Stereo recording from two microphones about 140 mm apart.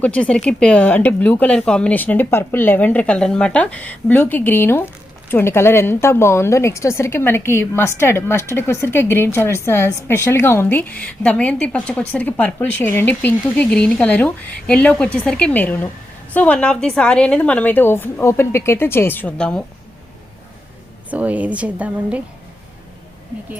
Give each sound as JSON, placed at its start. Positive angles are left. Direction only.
{"t": 0.0, "sound": "a woman's voice", "side_deg": 10}
{"t": 21.1, "sound": "a woman's voice", "side_deg": -10}